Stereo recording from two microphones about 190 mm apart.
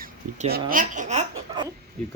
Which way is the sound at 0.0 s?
40° right (ahead or behind).